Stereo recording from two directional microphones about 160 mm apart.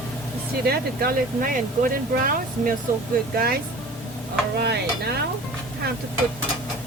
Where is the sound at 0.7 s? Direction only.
65° right (ahead or behind).